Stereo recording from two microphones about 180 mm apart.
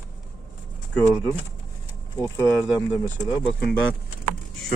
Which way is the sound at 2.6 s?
5° right (ahead or behind).